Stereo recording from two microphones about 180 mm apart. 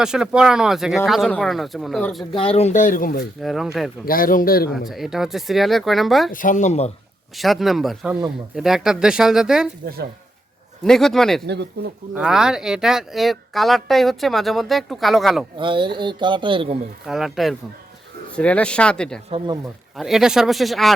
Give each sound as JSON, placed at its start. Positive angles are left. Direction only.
{"t": 0.0, "sound": "speech", "side_deg": -5}
{"t": 2.3, "sound": "speech", "side_deg": 30}
{"t": 3.4, "sound": "speech", "side_deg": 0}
{"t": 4.0, "sound": "speech", "side_deg": 55}
{"t": 4.9, "sound": "speech", "side_deg": 0}
{"t": 6.3, "sound": "speech", "side_deg": 45}
{"t": 7.3, "sound": "speech", "side_deg": 0}
{"t": 10.8, "sound": "speech", "side_deg": 5}
{"t": 11.4, "sound": "speech", "side_deg": -65}
{"t": 12.1, "sound": "speech", "side_deg": -5}
{"t": 15.5, "sound": "speech", "side_deg": -25}
{"t": 17.1, "sound": "speech", "side_deg": 0}